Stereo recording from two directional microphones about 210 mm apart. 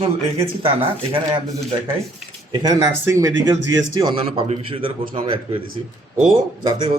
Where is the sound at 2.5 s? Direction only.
20° right (ahead or behind).